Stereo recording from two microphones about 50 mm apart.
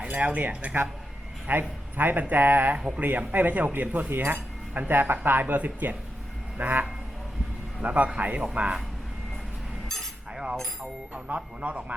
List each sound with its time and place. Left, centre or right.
0.1 s speech: right
2.7 s speech: right
3.0 s speech: right
10.3 s a sound: centre
11.1 s speech: right